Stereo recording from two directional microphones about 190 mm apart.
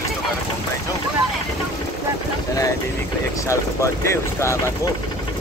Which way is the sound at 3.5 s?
15° left (ahead or behind).